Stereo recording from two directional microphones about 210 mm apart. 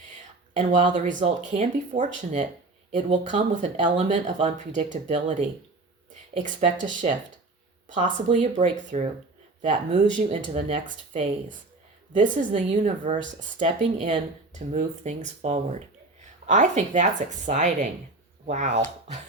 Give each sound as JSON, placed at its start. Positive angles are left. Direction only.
{"t": 0.9, "sound": "speech", "side_deg": -35}